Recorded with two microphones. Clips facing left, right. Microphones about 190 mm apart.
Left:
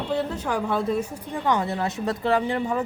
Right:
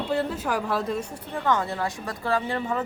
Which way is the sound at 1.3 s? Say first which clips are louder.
Left 1 dB; 15° left (ahead or behind).